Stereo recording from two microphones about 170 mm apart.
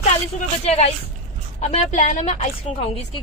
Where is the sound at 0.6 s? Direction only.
40° left (ahead or behind).